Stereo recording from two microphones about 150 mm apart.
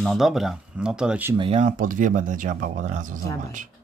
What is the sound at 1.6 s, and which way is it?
Speech, 60° right (ahead or behind).